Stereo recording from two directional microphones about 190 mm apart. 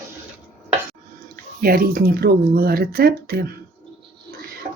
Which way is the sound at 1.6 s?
50° right (ahead or behind).